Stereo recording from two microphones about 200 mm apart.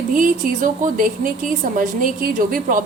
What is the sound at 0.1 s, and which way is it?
A woman's voice, 40° right (ahead or behind).